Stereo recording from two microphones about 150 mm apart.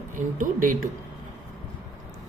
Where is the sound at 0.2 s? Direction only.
65° right (ahead or behind).